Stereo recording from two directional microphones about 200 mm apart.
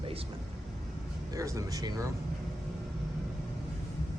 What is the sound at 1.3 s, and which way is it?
Speech, 15° right (ahead or behind).